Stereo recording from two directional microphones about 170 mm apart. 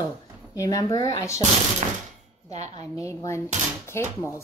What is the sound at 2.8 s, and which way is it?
A woman's voice, 20° left (ahead or behind).